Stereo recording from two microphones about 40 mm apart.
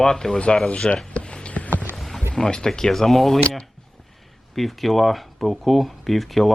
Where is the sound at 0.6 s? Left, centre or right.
Left.